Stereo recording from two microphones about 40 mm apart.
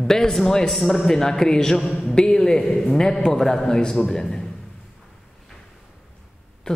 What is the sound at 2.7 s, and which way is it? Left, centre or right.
A man's voice, centre.